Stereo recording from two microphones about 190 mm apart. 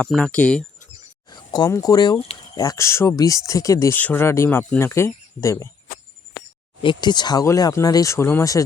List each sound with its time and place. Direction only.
0.0 s speech: 5° left (ahead or behind)
1.3 s speech: 20° left (ahead or behind)
2.6 s speech: 15° left (ahead or behind)
6.8 s speech: 20° left (ahead or behind)